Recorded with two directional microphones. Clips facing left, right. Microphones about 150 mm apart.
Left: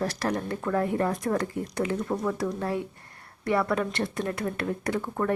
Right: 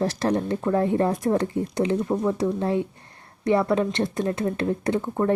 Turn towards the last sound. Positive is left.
turn(degrees=-25)  # may be behind; listen again after turning